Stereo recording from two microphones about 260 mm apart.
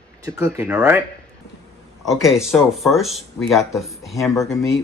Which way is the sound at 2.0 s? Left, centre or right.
Centre.